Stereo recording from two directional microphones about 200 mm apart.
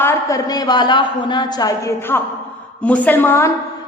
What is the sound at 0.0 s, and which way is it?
A woman's voice, 15° left (ahead or behind).